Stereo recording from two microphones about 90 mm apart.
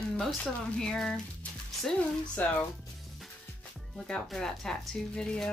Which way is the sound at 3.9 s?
5° left (ahead or behind).